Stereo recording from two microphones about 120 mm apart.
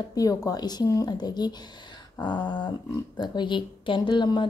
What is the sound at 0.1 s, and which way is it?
Speech, 30° left (ahead or behind).